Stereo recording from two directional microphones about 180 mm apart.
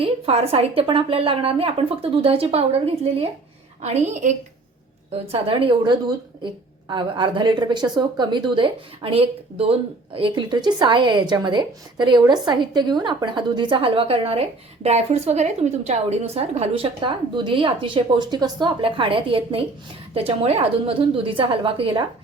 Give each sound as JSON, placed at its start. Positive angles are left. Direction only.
{"t": 0.0, "sound": "a woman's voice", "side_deg": -35}